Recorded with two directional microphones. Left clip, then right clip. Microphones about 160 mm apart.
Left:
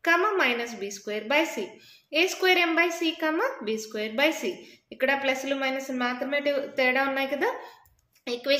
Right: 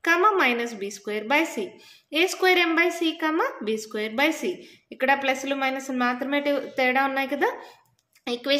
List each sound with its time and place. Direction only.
0.0 s a woman's voice: 30° right (ahead or behind)